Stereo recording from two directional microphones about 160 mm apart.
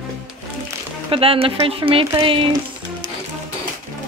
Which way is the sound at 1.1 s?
35° right (ahead or behind).